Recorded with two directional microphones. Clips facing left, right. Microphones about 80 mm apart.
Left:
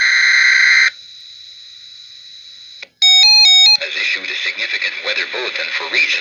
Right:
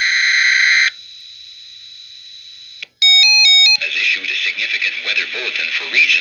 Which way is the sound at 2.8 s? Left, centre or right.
Left.